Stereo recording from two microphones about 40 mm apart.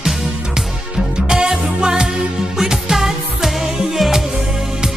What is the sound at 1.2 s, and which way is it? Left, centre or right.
Music, centre.